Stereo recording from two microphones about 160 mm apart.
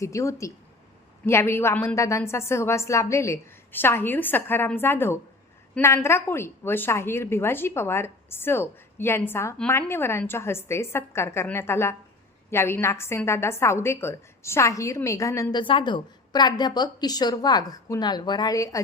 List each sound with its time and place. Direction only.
0.0 s a woman's voice: 20° left (ahead or behind)
15.6 s a woman's voice: 30° left (ahead or behind)